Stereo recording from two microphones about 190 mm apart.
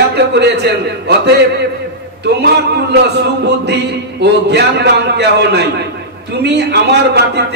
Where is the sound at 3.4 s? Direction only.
65° right (ahead or behind).